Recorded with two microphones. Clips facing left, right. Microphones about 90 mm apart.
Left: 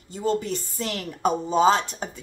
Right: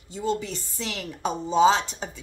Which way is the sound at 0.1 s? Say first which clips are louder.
Left 3 dB; 45° left (ahead or behind).